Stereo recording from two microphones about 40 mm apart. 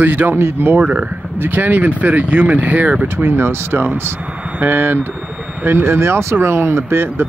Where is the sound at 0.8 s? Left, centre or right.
Right.